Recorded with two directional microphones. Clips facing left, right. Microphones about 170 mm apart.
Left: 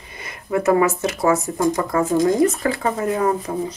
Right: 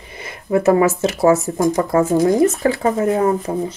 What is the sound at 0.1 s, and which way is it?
Speech, 25° right (ahead or behind).